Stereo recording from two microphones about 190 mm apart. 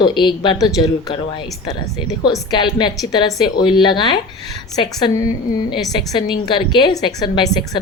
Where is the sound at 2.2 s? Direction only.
20° left (ahead or behind).